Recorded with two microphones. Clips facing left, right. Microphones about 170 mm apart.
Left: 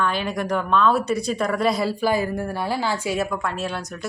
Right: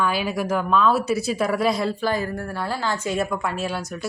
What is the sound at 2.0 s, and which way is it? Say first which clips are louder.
Speech: left 3 dB; 10° left (ahead or behind).